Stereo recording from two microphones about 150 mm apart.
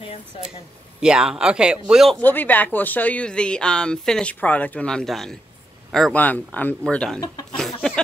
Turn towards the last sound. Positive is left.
turn(degrees=5)  # may be behind; listen again after turning